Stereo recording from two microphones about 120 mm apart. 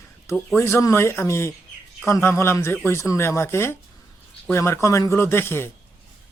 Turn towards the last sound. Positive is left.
turn(degrees=20)  # may be behind; listen again after turning